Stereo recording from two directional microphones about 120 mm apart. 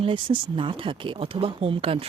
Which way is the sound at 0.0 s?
45° right (ahead or behind).